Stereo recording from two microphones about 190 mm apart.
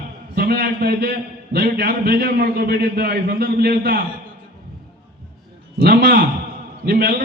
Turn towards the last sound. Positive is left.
turn(degrees=-60)  # may be behind; listen again after turning